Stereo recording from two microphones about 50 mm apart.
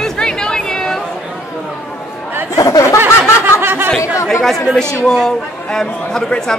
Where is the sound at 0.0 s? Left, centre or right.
Centre.